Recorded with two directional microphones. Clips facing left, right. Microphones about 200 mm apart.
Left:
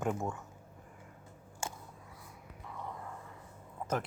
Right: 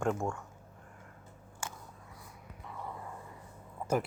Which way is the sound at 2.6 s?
5° right (ahead or behind).